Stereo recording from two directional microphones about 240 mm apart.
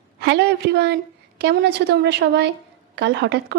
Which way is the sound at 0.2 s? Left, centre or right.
Right.